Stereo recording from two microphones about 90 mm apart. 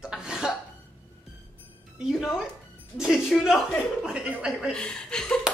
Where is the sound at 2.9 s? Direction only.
5° right (ahead or behind).